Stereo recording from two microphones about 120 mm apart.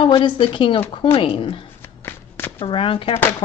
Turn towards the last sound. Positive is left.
turn(degrees=50)  # may be behind; listen again after turning